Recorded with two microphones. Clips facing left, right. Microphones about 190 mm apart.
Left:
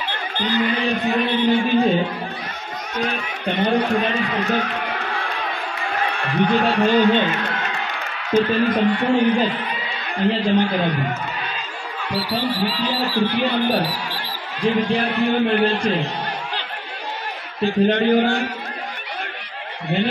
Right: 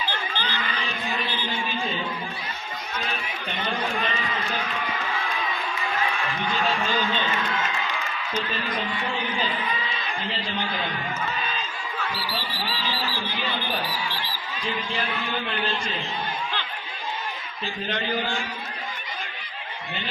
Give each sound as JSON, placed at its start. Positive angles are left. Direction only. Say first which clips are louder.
{"t": 0.3, "sound": "a man's voice", "louder": "left 10 dB", "side_deg": 60}
{"t": 3.0, "sound": "run", "louder": "left 9 dB", "side_deg": 60}
{"t": 7.9, "sound": "a man's voice", "louder": "left 10 dB", "side_deg": 65}
{"t": 17.6, "sound": "a man's voice", "louder": "left 14 dB", "side_deg": 60}